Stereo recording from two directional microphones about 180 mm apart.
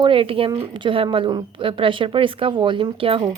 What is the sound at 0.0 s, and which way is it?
Speech, 30° right (ahead or behind).